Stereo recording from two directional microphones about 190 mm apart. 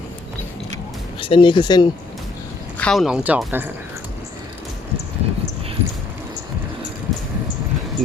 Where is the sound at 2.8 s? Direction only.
Centre (ahead or behind).